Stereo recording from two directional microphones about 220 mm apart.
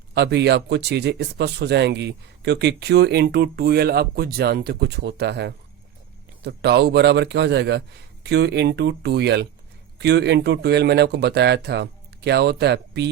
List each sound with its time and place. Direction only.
0.1 s speech: 50° right (ahead or behind)